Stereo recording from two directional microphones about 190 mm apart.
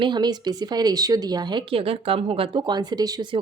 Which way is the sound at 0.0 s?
25° right (ahead or behind).